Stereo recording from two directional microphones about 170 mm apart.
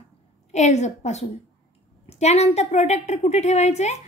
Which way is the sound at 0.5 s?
40° left (ahead or behind).